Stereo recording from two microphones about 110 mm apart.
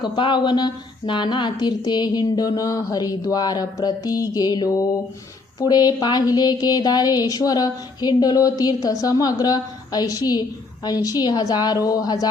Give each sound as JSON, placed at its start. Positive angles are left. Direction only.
{"t": 0.0, "sound": "a woman's voice", "side_deg": 45}